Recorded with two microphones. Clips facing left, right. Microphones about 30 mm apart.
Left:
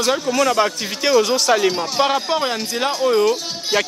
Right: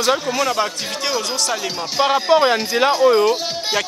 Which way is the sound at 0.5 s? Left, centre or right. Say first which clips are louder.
Left 2 dB; centre.